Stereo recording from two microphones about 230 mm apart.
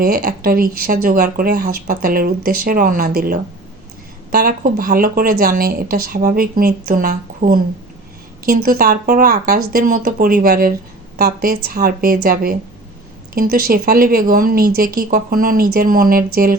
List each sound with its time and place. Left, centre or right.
0.0 s speech: right